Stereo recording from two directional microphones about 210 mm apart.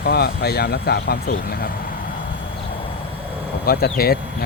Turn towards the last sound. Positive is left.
turn(degrees=45)  # may be behind; listen again after turning